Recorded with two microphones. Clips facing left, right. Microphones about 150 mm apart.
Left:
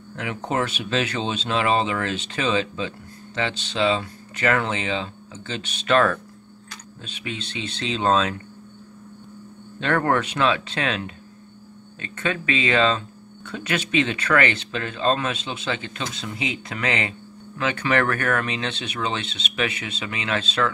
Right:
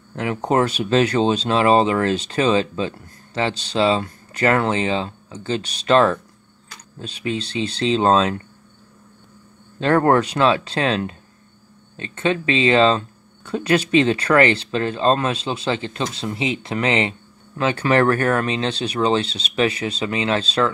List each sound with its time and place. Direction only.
0.1 s speech: 40° right (ahead or behind)
9.8 s speech: 35° right (ahead or behind)